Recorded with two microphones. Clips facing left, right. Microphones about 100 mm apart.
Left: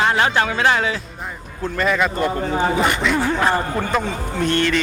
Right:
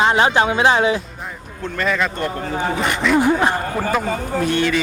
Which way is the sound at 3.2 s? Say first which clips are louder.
Right 2 dB; 15° right (ahead or behind).